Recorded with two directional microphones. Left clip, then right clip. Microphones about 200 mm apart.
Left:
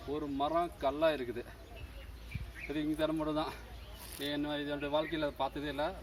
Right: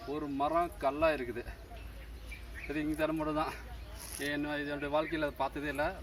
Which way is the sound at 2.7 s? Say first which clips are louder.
Right 1 dB; centre (ahead or behind).